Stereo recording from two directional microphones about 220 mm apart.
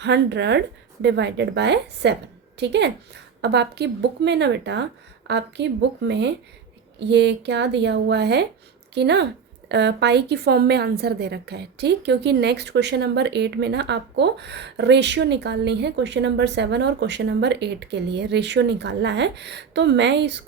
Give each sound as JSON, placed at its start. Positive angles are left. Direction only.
{"t": 0.0, "sound": "a woman's voice", "side_deg": -50}